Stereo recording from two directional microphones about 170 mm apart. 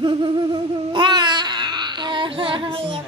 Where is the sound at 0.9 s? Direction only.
25° right (ahead or behind).